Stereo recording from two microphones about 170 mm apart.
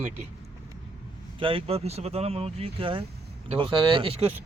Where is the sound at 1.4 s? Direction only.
30° right (ahead or behind).